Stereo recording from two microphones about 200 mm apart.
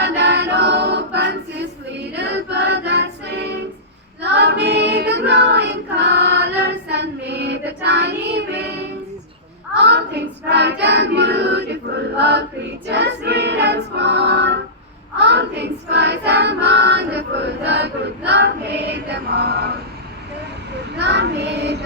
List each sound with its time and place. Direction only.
0.0 s music: 60° right (ahead or behind)
4.2 s child singing: 60° right (ahead or behind)
9.7 s choir: 60° right (ahead or behind)
15.2 s child singing: 60° right (ahead or behind)
18.3 s female singing: 60° right (ahead or behind)
21.0 s child singing: 60° right (ahead or behind)